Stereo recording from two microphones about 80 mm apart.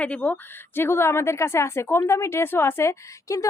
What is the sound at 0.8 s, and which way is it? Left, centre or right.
A woman's voice, left.